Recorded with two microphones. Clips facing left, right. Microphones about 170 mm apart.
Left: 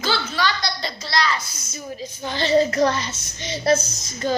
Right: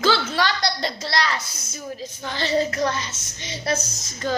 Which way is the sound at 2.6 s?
35° left (ahead or behind).